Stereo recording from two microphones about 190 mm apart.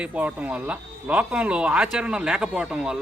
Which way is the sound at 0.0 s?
5° right (ahead or behind).